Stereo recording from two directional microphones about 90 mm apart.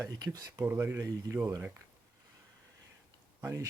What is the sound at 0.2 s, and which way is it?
Speech, 50° right (ahead or behind).